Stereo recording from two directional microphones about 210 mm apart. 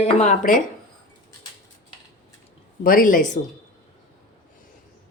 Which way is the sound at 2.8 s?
40° left (ahead or behind).